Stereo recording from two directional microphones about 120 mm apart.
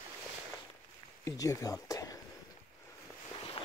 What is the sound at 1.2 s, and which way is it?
Speech, 30° left (ahead or behind).